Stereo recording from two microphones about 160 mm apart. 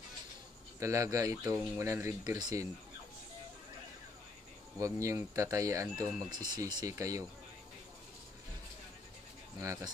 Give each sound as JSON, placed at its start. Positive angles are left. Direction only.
{"t": 0.7, "sound": "speech", "side_deg": -20}
{"t": 4.7, "sound": "speech", "side_deg": -20}
{"t": 9.6, "sound": "speech", "side_deg": -20}